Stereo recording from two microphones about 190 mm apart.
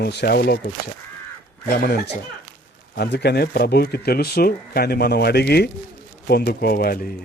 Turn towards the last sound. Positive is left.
turn(degrees=50)  # may be behind; listen again after turning